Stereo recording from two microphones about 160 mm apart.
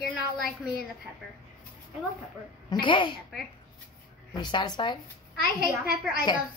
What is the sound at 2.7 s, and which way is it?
Speech, 30° left (ahead or behind).